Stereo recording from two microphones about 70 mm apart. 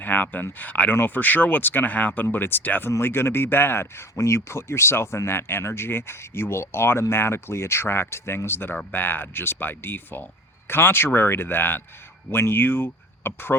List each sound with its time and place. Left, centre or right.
0.0 s speech: left